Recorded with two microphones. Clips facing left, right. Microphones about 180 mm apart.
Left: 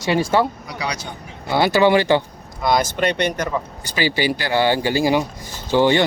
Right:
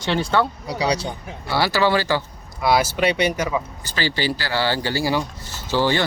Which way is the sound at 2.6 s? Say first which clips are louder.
Even; 5° right (ahead or behind).